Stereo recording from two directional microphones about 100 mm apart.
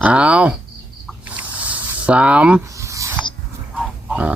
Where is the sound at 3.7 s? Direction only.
10° right (ahead or behind).